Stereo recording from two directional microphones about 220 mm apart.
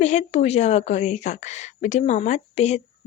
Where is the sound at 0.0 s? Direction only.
30° left (ahead or behind).